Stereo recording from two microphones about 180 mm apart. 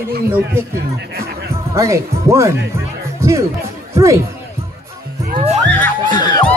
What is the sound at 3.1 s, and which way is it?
Music, 15° right (ahead or behind).